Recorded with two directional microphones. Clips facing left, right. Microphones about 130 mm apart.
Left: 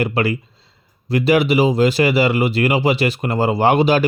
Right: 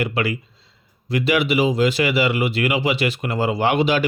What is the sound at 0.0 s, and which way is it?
Speech, 40° left (ahead or behind).